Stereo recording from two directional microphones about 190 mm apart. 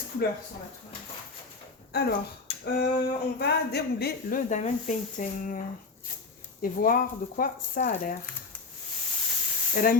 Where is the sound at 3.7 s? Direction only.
60° left (ahead or behind).